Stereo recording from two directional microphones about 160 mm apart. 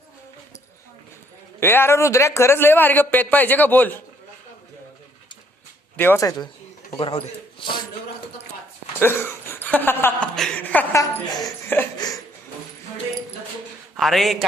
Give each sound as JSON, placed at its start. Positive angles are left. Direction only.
{"t": 1.5, "sound": "a man's voice", "side_deg": 15}
{"t": 6.0, "sound": "speech", "side_deg": 15}
{"t": 7.0, "sound": "speech", "side_deg": 35}
{"t": 9.0, "sound": "a sound", "side_deg": 15}
{"t": 10.3, "sound": "chuckle", "side_deg": 5}
{"t": 11.3, "sound": "speech", "side_deg": 25}
{"t": 13.9, "sound": "a man's voice", "side_deg": 0}